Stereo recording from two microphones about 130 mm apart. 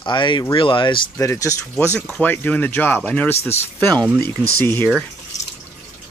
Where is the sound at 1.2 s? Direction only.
25° left (ahead or behind).